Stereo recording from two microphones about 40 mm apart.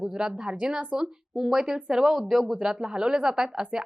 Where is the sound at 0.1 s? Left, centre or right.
Centre.